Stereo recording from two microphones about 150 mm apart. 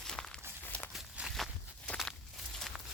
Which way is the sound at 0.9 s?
5° right (ahead or behind).